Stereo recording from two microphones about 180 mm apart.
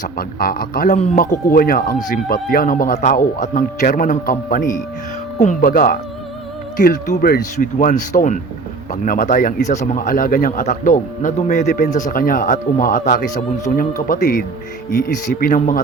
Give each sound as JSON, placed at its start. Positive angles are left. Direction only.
{"t": 0.0, "sound": "speech", "side_deg": 55}